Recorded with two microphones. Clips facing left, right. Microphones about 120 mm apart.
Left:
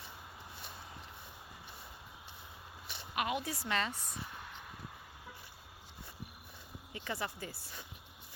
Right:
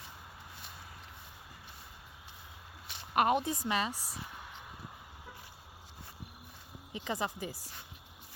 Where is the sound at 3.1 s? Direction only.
45° right (ahead or behind).